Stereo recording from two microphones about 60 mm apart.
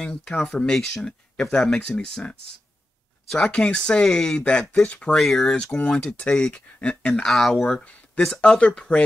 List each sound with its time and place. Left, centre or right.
0.0 s speech: centre
3.3 s speech: centre
5.1 s speech: centre
7.2 s speech: centre